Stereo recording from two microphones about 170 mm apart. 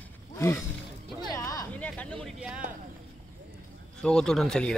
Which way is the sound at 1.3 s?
20° left (ahead or behind).